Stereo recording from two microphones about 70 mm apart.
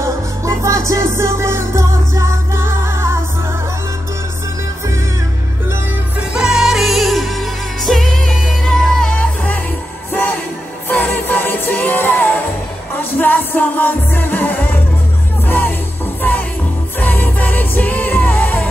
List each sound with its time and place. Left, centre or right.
0.0 s music: right
6.3 s music: centre
10.9 s music: left